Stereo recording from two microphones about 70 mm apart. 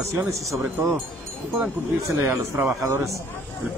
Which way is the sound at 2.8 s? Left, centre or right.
Right.